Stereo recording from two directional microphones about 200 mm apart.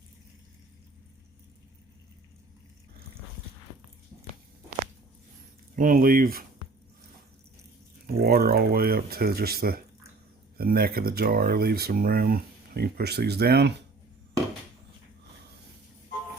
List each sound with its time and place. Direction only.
5.7 s speech: 45° right (ahead or behind)
8.0 s speech: 50° right (ahead or behind)